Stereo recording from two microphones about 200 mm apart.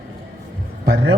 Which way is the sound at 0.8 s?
65° right (ahead or behind).